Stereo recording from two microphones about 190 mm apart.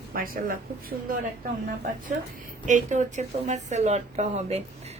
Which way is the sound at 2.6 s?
40° right (ahead or behind).